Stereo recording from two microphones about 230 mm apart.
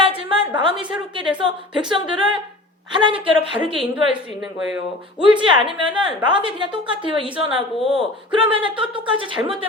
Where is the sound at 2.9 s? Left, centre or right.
Right.